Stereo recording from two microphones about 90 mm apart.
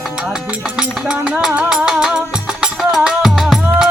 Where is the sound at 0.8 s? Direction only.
10° right (ahead or behind).